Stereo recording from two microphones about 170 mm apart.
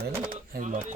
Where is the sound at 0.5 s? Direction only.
45° right (ahead or behind).